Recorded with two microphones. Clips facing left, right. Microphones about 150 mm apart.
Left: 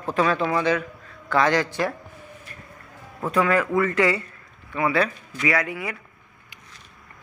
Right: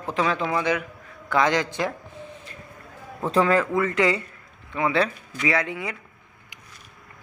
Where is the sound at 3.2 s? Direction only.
30° right (ahead or behind).